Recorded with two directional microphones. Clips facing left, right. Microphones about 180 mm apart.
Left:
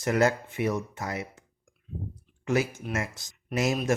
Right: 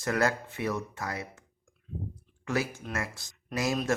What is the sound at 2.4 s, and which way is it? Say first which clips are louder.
Speech: left 4 dB; 20° left (ahead or behind).